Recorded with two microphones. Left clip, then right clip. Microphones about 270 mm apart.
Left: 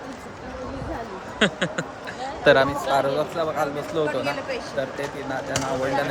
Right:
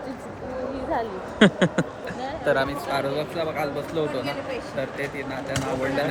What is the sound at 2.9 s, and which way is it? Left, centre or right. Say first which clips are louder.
Speech: left 4 dB; centre.